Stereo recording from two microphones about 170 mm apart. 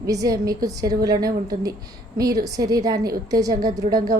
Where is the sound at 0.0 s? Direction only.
20° right (ahead or behind).